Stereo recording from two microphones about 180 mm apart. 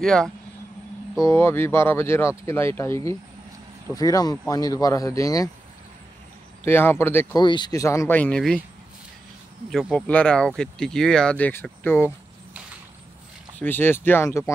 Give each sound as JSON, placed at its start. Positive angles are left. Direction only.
{"t": 0.0, "sound": "speech", "side_deg": 5}
{"t": 1.2, "sound": "speech", "side_deg": 15}
{"t": 6.6, "sound": "speech", "side_deg": 15}
{"t": 7.3, "sound": "speech", "side_deg": 25}
{"t": 9.7, "sound": "speech", "side_deg": 0}
{"t": 13.6, "sound": "speech", "side_deg": 10}